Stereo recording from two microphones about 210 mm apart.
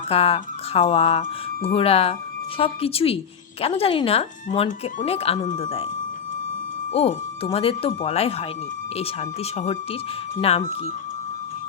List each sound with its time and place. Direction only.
0.1 s speech: 25° left (ahead or behind)
6.9 s speech: 30° left (ahead or behind)